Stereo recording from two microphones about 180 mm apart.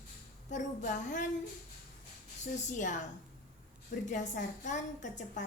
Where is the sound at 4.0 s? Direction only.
45° left (ahead or behind).